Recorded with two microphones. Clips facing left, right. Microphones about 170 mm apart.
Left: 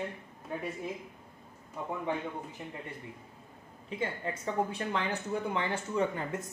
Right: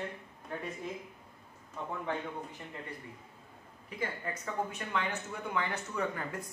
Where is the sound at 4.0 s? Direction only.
25° left (ahead or behind).